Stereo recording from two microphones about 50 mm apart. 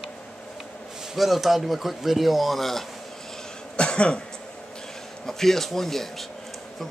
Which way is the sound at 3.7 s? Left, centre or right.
Left.